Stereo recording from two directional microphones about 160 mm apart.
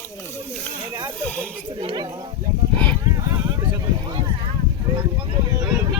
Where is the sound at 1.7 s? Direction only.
30° right (ahead or behind).